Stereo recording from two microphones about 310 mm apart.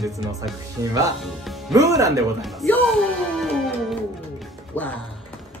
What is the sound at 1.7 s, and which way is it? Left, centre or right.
Speech, centre.